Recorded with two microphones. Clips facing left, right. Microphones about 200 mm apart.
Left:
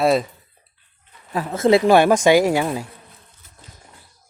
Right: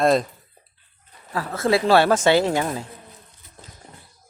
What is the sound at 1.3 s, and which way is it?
Speech, 20° left (ahead or behind).